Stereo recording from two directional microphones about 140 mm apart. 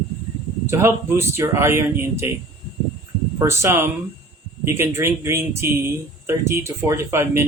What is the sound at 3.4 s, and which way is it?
Speech, 20° right (ahead or behind).